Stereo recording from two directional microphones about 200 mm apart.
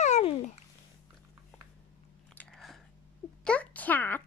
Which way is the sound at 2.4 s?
Centre (ahead or behind).